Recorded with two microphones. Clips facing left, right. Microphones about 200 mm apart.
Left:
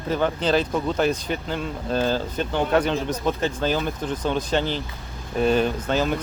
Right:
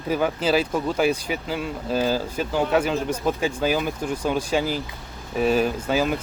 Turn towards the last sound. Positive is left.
turn(degrees=-5)  # may be behind; listen again after turning